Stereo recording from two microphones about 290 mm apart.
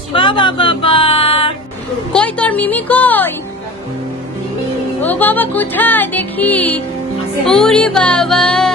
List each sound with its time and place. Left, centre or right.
0.1 s music: centre
2.1 s music: centre
5.0 s music: centre